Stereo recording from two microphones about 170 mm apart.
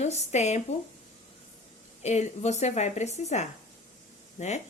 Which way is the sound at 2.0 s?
40° left (ahead or behind).